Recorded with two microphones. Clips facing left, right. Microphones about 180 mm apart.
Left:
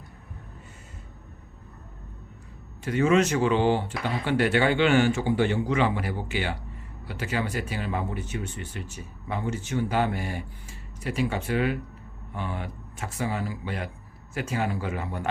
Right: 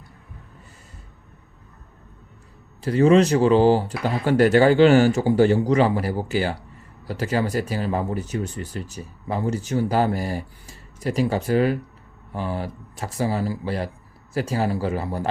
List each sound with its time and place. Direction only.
2.8 s speech: 35° right (ahead or behind)